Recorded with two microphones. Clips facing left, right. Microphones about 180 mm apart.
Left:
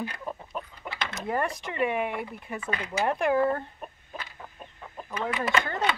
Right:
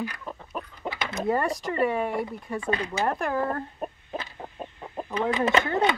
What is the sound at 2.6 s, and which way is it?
Speech, 30° right (ahead or behind).